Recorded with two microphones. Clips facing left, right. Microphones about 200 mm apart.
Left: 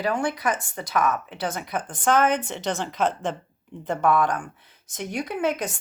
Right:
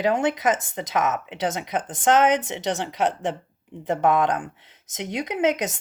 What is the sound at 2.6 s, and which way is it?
Speech, 75° right (ahead or behind).